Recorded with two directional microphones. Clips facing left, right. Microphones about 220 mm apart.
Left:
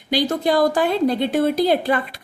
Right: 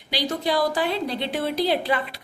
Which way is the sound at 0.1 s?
50° left (ahead or behind).